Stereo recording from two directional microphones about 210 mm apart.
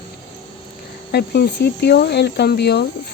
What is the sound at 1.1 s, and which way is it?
Speech, 50° left (ahead or behind).